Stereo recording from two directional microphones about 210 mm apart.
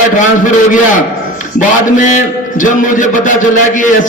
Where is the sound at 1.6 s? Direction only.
35° left (ahead or behind).